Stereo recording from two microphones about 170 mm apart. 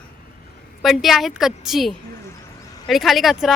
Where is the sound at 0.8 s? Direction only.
Centre (ahead or behind).